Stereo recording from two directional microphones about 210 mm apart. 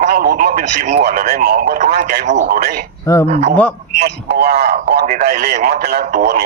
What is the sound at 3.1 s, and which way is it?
Speech, 15° left (ahead or behind).